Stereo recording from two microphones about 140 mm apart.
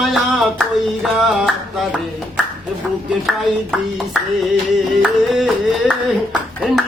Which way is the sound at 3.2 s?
Centre (ahead or behind).